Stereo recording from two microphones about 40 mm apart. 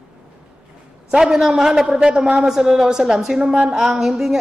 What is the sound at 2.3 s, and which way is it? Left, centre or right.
A woman's voice, centre.